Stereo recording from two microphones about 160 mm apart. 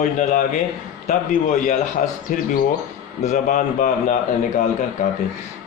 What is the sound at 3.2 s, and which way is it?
Speech, 50° left (ahead or behind).